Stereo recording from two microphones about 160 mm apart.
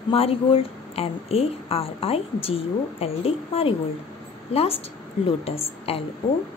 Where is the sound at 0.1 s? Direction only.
35° left (ahead or behind).